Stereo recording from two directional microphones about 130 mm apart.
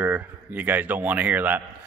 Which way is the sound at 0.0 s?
15° right (ahead or behind).